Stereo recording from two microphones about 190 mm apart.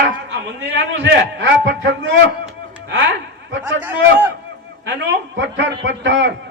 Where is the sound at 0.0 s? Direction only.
70° right (ahead or behind).